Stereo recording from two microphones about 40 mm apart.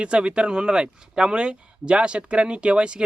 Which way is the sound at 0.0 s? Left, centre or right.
Right.